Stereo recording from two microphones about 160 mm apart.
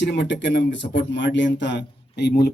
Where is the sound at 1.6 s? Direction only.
90° left.